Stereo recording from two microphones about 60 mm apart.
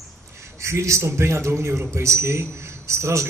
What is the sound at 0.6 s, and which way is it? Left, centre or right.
A man's voice, right.